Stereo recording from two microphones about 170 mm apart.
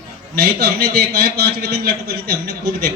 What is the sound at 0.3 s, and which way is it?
A man's voice, 65° right (ahead or behind).